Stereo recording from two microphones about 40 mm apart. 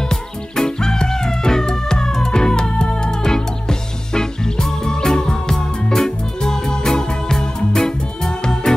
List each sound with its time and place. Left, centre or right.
0.1 s music: centre